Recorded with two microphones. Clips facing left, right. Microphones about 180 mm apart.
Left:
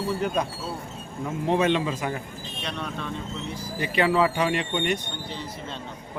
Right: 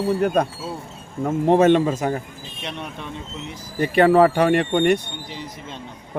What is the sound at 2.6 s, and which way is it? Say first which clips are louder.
Speech: right 1 dB; 20° right (ahead or behind).